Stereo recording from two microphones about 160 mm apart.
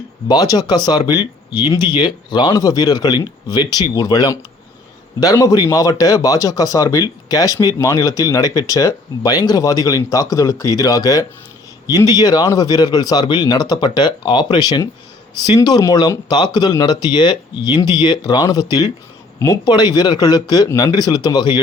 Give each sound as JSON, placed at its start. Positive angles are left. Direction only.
{"t": 0.3, "sound": "speech", "side_deg": 25}